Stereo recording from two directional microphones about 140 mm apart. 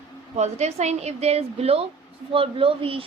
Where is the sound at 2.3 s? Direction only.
40° right (ahead or behind).